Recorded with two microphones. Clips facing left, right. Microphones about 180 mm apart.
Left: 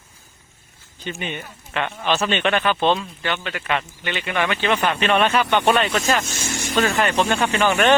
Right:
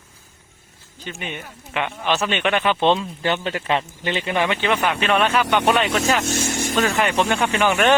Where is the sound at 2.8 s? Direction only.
25° right (ahead or behind).